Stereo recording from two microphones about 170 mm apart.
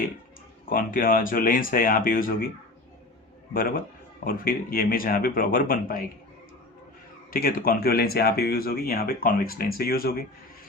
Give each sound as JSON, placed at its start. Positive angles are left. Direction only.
{"t": 0.6, "sound": "speech", "side_deg": 55}
{"t": 3.5, "sound": "speech", "side_deg": 55}
{"t": 7.3, "sound": "speech", "side_deg": 55}